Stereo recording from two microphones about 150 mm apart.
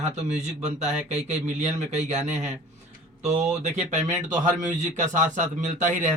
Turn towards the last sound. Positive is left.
turn(degrees=-55)  # may be behind; listen again after turning